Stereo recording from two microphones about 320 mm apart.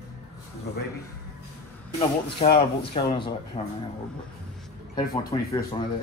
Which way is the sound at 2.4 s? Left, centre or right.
Centre.